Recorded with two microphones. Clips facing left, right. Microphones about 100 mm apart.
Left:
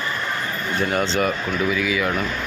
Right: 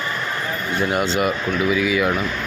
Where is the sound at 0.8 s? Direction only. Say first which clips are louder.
Right 1 dB; 10° right (ahead or behind).